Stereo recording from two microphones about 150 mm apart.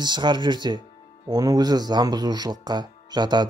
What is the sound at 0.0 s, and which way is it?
Speech, 30° right (ahead or behind).